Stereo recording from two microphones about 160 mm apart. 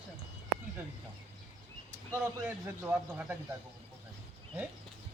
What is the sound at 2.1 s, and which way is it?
A man's voice, 15° right (ahead or behind).